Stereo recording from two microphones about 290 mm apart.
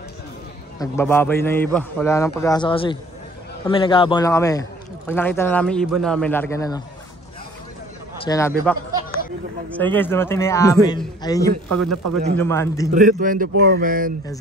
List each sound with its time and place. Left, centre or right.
0.7 s a man's voice: centre
8.2 s a man's voice: centre
11.8 s a man's voice: right
12.4 s a man's voice: centre
12.9 s speech: right